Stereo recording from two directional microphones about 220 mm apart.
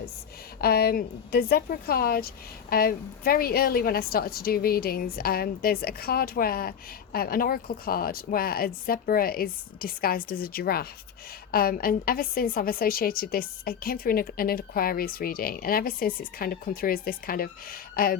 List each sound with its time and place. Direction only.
0.6 s a woman's voice: 45° left (ahead or behind)